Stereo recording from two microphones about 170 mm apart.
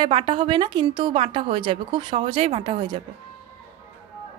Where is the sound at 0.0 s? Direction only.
30° right (ahead or behind).